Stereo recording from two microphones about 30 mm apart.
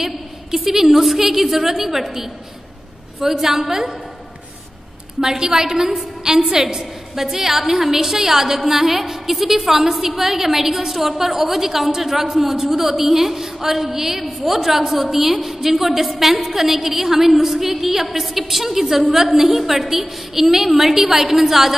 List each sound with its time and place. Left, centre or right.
0.0 s a woman's voice: centre
5.2 s a woman's voice: centre